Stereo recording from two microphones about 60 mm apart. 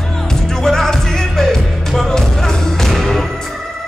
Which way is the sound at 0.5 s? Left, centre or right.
Centre.